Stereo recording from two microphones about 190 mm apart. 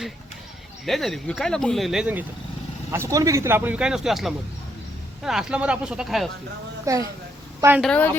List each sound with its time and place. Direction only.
0.9 s speech: centre (ahead or behind)
2.9 s speech: 15° right (ahead or behind)
6.8 s speech: 15° right (ahead or behind)
7.8 s speech: 5° left (ahead or behind)